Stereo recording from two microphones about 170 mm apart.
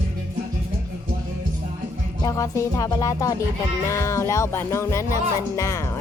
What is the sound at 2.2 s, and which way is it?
Music, 20° left (ahead or behind).